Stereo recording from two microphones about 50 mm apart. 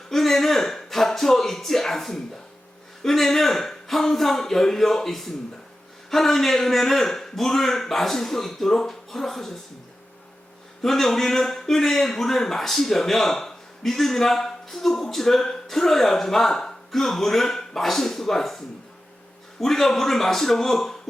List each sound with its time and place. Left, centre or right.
0.1 s a sound: centre
3.0 s a man's voice: centre
10.8 s a man's voice: centre